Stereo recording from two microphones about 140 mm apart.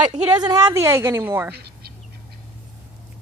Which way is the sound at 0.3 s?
30° right (ahead or behind).